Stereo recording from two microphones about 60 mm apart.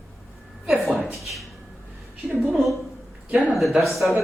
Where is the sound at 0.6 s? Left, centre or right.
Centre.